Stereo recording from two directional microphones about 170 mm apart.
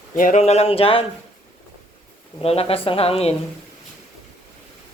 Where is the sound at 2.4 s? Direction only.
35° left (ahead or behind).